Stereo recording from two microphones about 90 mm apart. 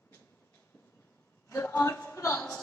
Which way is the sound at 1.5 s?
20° left (ahead or behind).